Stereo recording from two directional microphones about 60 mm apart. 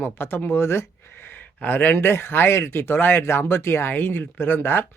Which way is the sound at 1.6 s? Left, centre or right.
Left.